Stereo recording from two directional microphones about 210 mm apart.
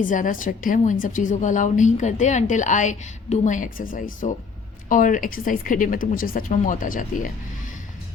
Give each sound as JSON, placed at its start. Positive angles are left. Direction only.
{"t": 0.0, "sound": "a woman's voice", "side_deg": 40}